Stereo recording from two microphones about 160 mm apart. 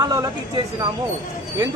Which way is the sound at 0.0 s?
30° right (ahead or behind).